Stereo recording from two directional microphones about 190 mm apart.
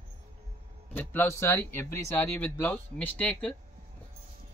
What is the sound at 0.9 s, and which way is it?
Speech, 10° left (ahead or behind).